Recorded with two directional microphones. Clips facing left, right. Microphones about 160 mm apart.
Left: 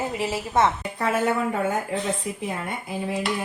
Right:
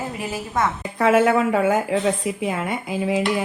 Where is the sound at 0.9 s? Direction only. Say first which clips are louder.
Right 7 dB; 90° right.